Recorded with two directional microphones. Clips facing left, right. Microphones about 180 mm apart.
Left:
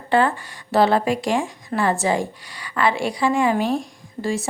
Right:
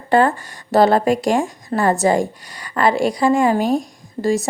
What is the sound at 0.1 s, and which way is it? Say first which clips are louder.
A woman's voice: right 4 dB; 45° right (ahead or behind).